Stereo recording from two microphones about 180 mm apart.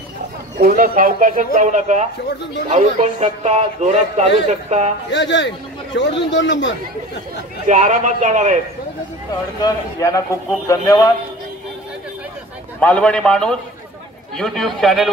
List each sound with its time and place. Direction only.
0.6 s speech: 50° right (ahead or behind)
5.1 s a man's voice: 90° left
5.9 s a man's voice: 75° left (ahead or behind)
6.3 s speech: 85° left
7.6 s speech: 45° right (ahead or behind)
9.3 s a man's voice: 20° left (ahead or behind)
12.8 s a man's voice: 5° left (ahead or behind)